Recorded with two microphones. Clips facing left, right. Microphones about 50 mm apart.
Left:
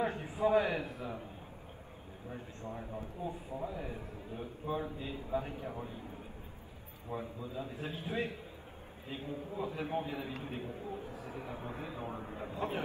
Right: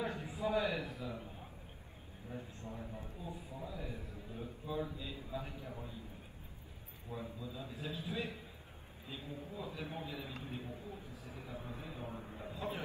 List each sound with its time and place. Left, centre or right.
0.0 s a man's voice: left
2.3 s a man's voice: left
7.1 s a man's voice: left